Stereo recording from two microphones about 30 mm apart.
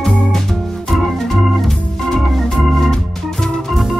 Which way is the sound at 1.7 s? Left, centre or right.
Centre.